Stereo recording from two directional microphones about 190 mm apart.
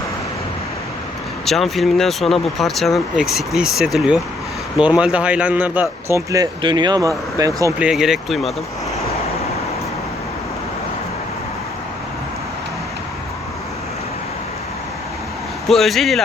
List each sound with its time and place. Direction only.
1.5 s speech: centre (ahead or behind); by 7.7 s 20° right (ahead or behind)
7.8 s speech: 5° right (ahead or behind)
15.7 s speech: centre (ahead or behind)